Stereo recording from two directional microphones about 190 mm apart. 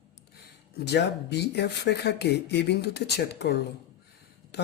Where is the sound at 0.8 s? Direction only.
60° left (ahead or behind).